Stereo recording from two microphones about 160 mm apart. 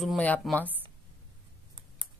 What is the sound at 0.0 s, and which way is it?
Speech, 5° left (ahead or behind).